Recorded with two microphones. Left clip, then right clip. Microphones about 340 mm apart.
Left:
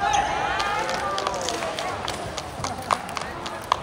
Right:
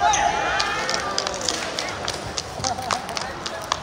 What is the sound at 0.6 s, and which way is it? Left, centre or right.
Fire, left.